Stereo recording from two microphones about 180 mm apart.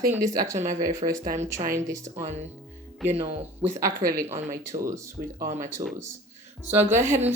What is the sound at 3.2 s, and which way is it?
Speech, 35° right (ahead or behind).